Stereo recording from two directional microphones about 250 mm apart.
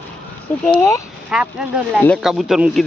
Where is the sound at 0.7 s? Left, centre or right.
Centre.